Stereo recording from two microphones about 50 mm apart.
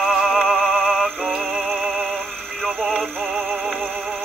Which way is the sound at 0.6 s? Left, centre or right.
Centre.